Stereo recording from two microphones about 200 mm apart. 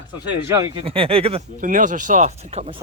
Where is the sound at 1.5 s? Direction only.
40° right (ahead or behind).